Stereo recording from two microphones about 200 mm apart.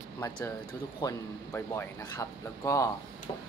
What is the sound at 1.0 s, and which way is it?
Speech, 15° left (ahead or behind).